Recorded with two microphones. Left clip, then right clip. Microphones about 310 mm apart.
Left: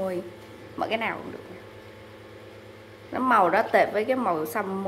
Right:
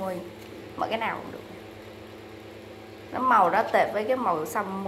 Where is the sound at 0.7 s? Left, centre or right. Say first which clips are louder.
Left 1 dB; centre.